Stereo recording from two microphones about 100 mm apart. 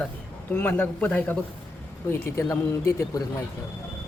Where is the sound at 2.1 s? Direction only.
25° left (ahead or behind).